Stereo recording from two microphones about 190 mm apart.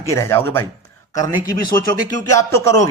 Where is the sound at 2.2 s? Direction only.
15° left (ahead or behind).